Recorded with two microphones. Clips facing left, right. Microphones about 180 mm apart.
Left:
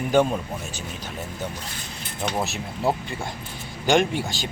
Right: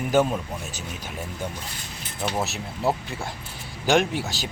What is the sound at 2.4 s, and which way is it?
Speech, centre (ahead or behind).